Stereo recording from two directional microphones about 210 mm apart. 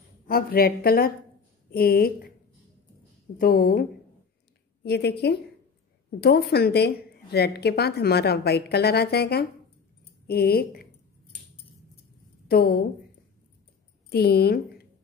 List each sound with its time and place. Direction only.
0.3 s a woman's voice: 45° left (ahead or behind)
3.3 s a woman's voice: 45° left (ahead or behind)
4.8 s a woman's voice: 50° left (ahead or behind)
12.4 s a woman's voice: 45° left (ahead or behind)
14.0 s speech: 50° left (ahead or behind)